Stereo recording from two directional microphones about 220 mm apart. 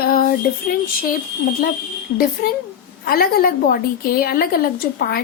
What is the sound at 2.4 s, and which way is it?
Speech, 45° left (ahead or behind).